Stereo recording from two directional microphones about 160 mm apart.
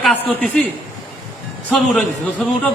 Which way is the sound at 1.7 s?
5° left (ahead or behind).